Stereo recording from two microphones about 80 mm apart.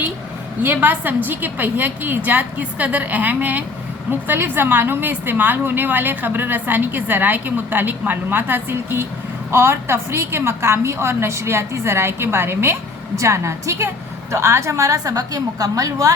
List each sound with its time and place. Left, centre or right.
0.6 s a woman's voice: right